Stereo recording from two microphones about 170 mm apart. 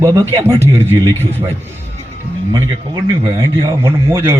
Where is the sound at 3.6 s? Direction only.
15° right (ahead or behind).